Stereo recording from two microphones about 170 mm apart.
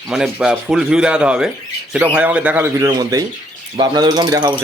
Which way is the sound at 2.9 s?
25° right (ahead or behind).